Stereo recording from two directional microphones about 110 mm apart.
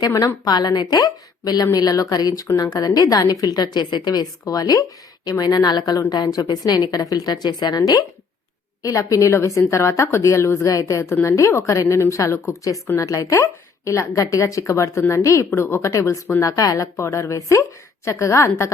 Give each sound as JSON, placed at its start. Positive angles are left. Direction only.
{"t": 0.0, "sound": "a woman's voice", "side_deg": 35}